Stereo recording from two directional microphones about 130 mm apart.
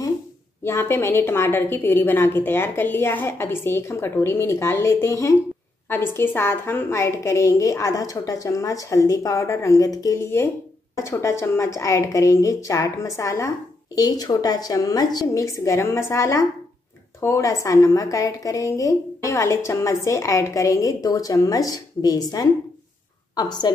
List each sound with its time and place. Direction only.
0.7 s a woman's voice: 20° left (ahead or behind)